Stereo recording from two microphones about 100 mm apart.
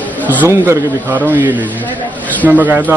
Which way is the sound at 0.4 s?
20° right (ahead or behind).